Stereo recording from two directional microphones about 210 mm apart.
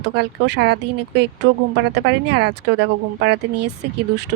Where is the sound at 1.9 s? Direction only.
55° right (ahead or behind).